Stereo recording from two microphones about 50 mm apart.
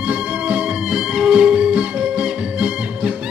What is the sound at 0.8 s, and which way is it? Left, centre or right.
Music, centre.